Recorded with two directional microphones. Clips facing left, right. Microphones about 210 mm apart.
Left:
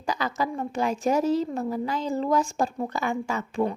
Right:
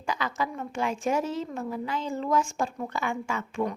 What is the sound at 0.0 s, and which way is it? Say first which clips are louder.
A woman's voice: left 3 dB; 40° left (ahead or behind).